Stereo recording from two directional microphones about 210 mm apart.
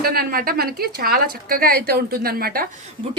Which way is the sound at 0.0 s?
45° right (ahead or behind).